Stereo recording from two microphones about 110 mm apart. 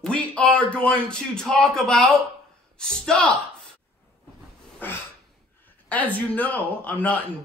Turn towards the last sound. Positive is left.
turn(degrees=15)  # may be behind; listen again after turning